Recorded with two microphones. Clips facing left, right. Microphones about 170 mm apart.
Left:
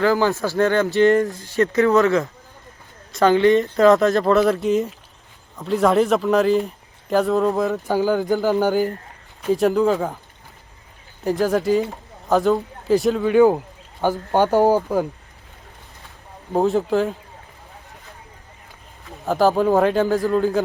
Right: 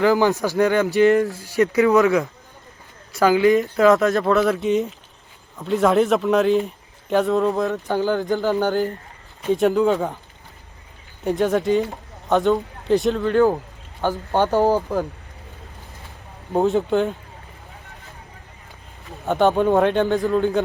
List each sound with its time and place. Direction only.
0.0 s speech: 15° right (ahead or behind)
1.1 s a man's voice: centre (ahead or behind)
1.5 s a man's voice: 15° right (ahead or behind)
11.2 s speech: centre (ahead or behind)
13.3 s speech: 15° left (ahead or behind)
16.5 s a man's voice: centre (ahead or behind)
19.0 s a man's voice: centre (ahead or behind)